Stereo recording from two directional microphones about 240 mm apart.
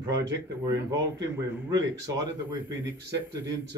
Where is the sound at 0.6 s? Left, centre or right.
Centre.